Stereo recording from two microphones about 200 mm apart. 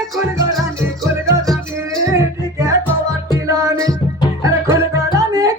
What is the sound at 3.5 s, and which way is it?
Music, 15° right (ahead or behind).